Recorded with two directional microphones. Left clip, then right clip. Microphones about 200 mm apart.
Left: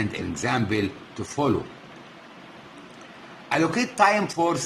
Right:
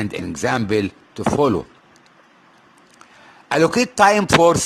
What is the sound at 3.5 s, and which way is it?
Speech, 45° right (ahead or behind).